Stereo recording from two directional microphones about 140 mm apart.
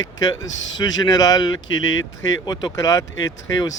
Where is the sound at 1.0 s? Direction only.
25° left (ahead or behind).